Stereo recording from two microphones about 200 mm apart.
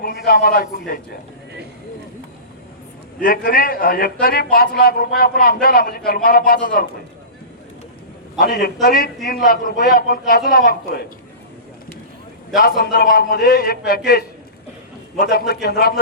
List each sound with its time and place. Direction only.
0.0 s a man's voice: 50° left (ahead or behind)
3.2 s a man's voice: 45° left (ahead or behind)
8.4 s a man's voice: 50° left (ahead or behind)
12.5 s a man's voice: 50° left (ahead or behind)